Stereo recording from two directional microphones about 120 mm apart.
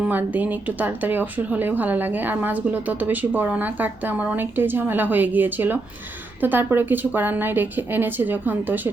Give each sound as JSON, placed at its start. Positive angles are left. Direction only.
{"t": 0.0, "sound": "speech", "side_deg": -15}